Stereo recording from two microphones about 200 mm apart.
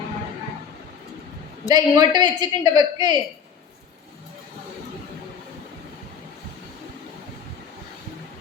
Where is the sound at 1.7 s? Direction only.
20° right (ahead or behind).